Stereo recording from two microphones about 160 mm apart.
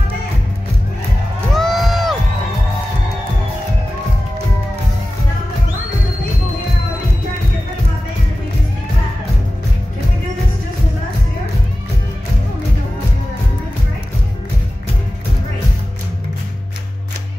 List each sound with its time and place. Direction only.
1.5 s crowd: centre (ahead or behind)